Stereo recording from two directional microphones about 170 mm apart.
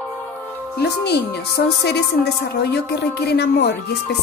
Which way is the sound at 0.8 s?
75° left (ahead or behind).